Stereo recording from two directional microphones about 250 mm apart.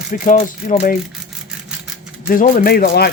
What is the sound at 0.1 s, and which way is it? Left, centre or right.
Speech, left.